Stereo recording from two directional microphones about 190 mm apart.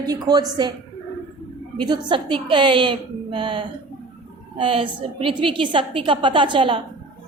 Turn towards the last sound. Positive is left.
turn(degrees=-25)  # may be behind; listen again after turning